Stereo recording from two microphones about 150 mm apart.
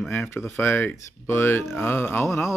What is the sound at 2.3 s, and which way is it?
Speech, centre (ahead or behind).